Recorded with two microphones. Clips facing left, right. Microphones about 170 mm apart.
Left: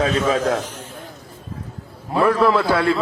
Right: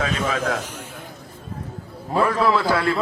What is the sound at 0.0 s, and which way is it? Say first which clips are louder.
Speech: left 5 dB; 35° left (ahead or behind).